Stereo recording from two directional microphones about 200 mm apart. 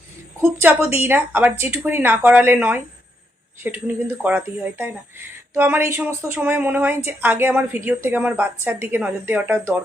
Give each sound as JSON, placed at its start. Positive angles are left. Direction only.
{"t": 0.4, "sound": "speech", "side_deg": -10}